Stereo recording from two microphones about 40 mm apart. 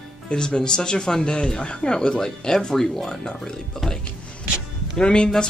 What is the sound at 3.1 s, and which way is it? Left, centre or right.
Speech, centre.